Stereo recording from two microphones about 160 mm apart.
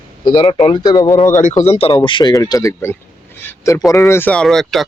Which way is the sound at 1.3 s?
50° left (ahead or behind).